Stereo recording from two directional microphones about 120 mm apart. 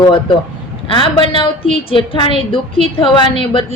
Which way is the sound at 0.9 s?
45° left (ahead or behind).